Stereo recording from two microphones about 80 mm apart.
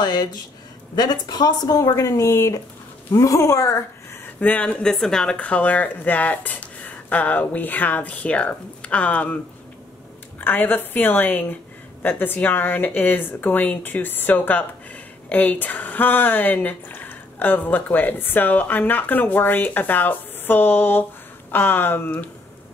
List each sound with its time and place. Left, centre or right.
0.0 s speech: left
4.4 s speech: centre
10.4 s speech: left